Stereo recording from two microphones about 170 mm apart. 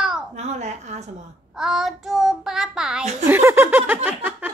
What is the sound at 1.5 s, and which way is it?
Child singing, centre (ahead or behind).